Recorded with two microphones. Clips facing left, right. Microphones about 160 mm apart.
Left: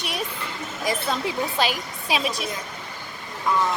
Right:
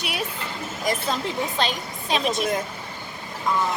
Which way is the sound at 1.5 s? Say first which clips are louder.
Left 1 dB; 5° left (ahead or behind).